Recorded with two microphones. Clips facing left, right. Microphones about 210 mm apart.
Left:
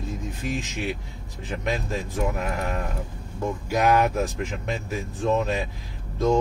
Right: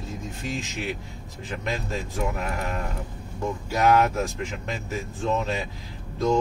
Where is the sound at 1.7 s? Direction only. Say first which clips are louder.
Left 2 dB; 15° left (ahead or behind).